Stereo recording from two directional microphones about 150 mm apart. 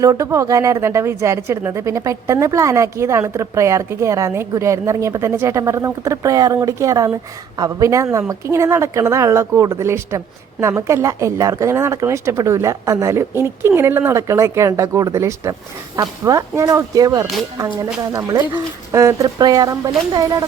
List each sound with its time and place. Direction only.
0.0 s speech: 20° right (ahead or behind)